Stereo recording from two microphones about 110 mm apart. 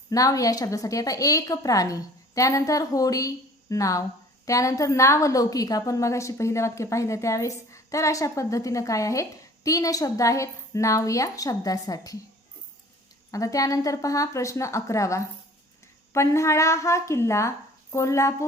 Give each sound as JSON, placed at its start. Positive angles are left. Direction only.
{"t": 0.1, "sound": "a woman's voice", "side_deg": 30}
{"t": 13.3, "sound": "a woman's voice", "side_deg": 30}